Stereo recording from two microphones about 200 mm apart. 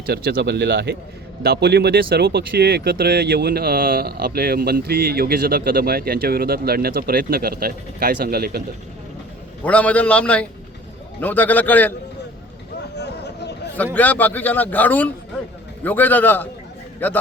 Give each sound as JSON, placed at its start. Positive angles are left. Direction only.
{"t": 0.0, "sound": "speech", "side_deg": -50}
{"t": 9.6, "sound": "a man's voice", "side_deg": 5}
{"t": 13.0, "sound": "a sound", "side_deg": 55}
{"t": 13.9, "sound": "a man's voice", "side_deg": 10}